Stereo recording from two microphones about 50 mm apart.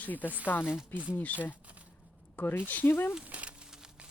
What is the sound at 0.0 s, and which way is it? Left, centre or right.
Speech, left.